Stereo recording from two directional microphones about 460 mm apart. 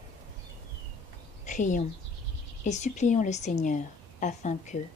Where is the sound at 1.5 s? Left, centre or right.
Centre.